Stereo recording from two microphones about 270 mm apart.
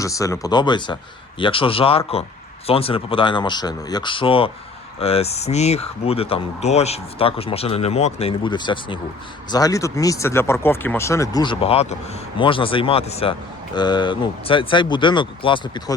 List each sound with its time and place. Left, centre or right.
0.0 s speech: centre